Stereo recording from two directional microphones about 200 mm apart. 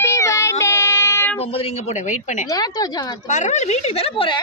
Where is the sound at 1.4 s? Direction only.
30° left (ahead or behind).